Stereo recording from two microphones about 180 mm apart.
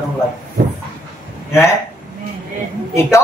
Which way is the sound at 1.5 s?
15° left (ahead or behind).